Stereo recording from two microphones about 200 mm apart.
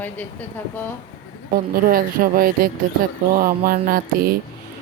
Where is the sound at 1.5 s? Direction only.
45° right (ahead or behind).